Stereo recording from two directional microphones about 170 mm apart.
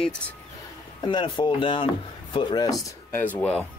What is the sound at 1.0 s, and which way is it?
Speech, 30° left (ahead or behind).